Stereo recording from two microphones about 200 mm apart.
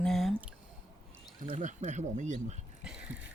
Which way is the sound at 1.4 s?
35° right (ahead or behind).